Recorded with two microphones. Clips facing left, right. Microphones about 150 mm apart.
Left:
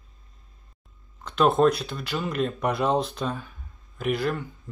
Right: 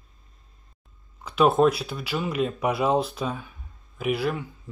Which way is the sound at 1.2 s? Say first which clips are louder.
Right 1 dB; 5° right (ahead or behind).